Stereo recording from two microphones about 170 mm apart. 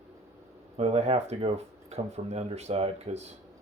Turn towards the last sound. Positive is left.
turn(degrees=-40)  # may be behind; listen again after turning